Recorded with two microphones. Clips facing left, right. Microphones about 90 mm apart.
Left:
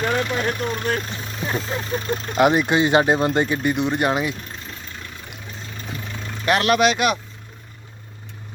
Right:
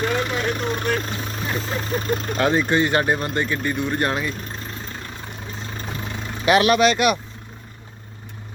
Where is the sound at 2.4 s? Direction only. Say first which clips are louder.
Left 3 dB; 15° left (ahead or behind).